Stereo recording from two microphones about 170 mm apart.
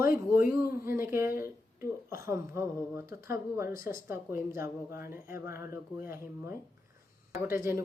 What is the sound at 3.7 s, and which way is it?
Speech, 55° left (ahead or behind).